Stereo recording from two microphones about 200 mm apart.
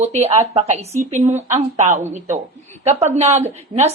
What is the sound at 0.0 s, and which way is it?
Speech, 35° right (ahead or behind).